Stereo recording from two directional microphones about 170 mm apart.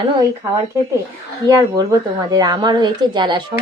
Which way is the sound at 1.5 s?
25° right (ahead or behind).